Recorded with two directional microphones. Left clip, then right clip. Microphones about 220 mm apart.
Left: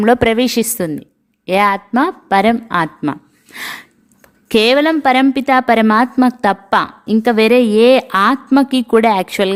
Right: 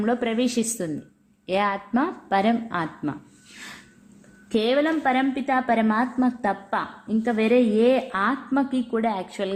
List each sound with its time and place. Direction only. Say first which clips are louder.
0.0 s a woman's voice: left 12 dB; 45° left (ahead or behind)
4.4 s a woman's voice: left 10 dB; 45° left (ahead or behind)